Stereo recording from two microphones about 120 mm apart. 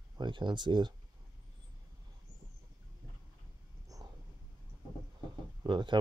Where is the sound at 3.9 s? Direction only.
30° right (ahead or behind).